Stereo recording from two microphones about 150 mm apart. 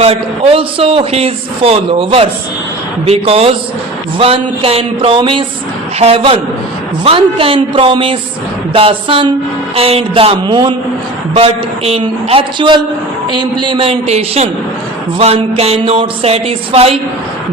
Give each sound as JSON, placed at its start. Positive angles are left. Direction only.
{"t": 0.0, "sound": "a man's voice", "side_deg": -40}